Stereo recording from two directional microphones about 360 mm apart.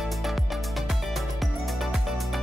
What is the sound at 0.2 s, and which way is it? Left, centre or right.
Music, centre.